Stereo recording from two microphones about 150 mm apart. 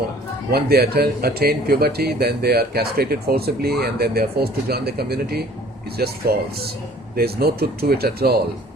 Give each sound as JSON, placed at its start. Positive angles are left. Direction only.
{"t": 0.5, "sound": "a man's voice", "side_deg": -90}
{"t": 7.2, "sound": "a man's voice", "side_deg": -90}